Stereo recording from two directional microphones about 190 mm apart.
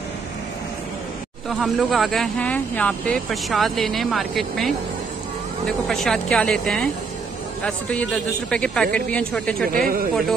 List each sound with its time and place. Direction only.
1.5 s speech: centre (ahead or behind)
9.8 s speech: 50° right (ahead or behind)